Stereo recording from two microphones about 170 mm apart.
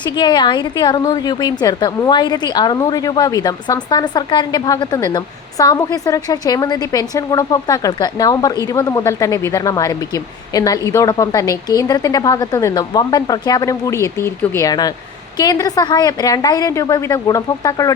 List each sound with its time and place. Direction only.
0.2 s a woman's voice: 25° left (ahead or behind)